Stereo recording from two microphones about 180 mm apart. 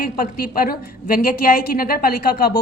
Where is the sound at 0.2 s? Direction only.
55° left (ahead or behind).